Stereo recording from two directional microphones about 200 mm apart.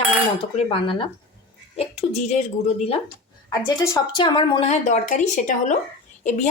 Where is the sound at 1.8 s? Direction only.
30° left (ahead or behind).